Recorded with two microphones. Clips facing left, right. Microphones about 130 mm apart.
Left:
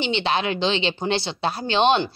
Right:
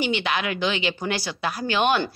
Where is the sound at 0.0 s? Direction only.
30° left (ahead or behind).